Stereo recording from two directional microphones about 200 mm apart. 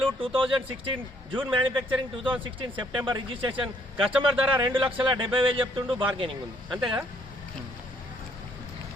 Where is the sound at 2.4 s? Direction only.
25° right (ahead or behind).